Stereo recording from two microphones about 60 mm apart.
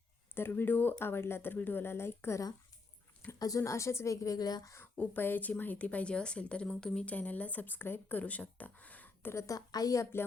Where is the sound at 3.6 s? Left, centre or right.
Left.